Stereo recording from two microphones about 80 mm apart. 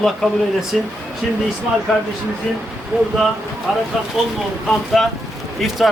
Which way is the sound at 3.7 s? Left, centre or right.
Centre.